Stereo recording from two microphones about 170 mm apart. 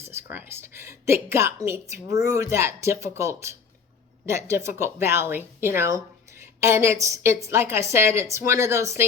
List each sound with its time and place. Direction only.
0.0 s a woman's voice: 15° right (ahead or behind)